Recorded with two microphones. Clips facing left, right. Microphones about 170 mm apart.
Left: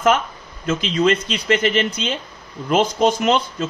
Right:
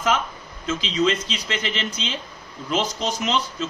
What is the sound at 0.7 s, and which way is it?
A man's voice, 55° left (ahead or behind).